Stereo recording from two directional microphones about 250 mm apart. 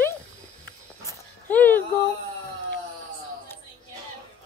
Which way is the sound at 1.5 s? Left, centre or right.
Centre.